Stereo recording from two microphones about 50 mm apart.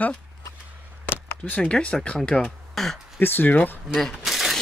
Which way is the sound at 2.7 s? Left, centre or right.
Centre.